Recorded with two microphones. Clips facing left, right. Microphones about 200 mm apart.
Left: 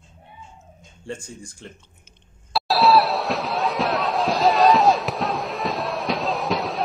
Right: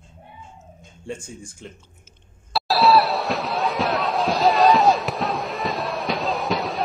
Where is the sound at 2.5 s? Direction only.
Centre (ahead or behind).